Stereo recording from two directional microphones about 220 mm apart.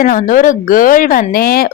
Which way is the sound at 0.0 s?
40° left (ahead or behind).